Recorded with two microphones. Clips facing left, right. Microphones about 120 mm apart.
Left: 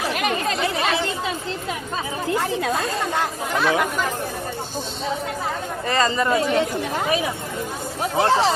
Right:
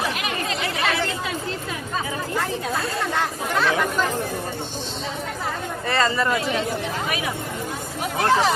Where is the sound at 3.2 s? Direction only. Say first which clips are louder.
Right 2 dB; 15° left (ahead or behind).